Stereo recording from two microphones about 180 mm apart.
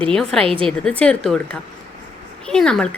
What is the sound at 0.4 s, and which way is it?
Speech, 30° right (ahead or behind).